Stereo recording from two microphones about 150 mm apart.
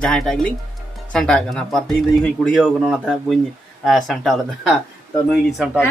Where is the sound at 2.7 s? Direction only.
5° right (ahead or behind).